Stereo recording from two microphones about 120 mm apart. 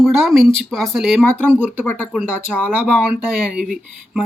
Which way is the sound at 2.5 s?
10° left (ahead or behind).